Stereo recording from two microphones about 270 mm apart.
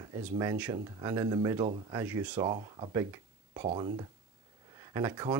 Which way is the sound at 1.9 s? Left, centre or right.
Centre.